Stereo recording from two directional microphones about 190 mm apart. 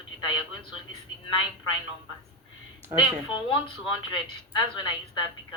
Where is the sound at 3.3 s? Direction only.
25° left (ahead or behind).